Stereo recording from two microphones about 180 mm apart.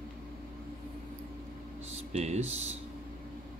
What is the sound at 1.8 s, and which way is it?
Speech, 35° right (ahead or behind).